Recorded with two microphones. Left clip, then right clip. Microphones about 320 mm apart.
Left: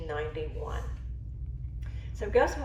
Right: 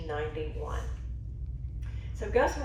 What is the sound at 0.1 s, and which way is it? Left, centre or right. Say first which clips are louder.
Speech: right 1 dB; left.